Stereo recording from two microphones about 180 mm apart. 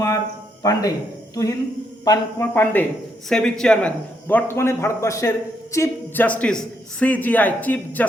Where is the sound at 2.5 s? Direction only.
10° left (ahead or behind).